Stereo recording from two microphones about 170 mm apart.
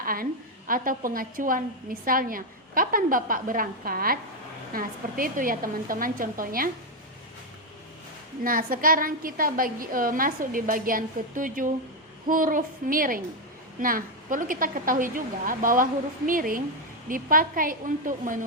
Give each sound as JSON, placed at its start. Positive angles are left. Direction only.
{"t": 0.0, "sound": "a woman's voice", "side_deg": -55}
{"t": 8.4, "sound": "a woman's voice", "side_deg": -55}